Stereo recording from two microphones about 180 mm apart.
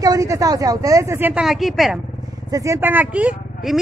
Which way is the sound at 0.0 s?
20° right (ahead or behind).